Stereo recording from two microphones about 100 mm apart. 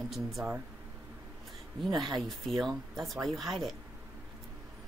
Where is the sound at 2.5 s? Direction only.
Centre (ahead or behind).